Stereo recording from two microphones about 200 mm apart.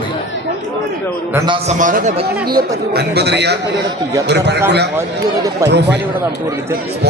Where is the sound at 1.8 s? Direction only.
40° right (ahead or behind).